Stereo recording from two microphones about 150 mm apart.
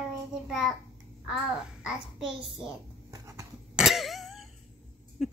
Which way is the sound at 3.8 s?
Centre (ahead or behind).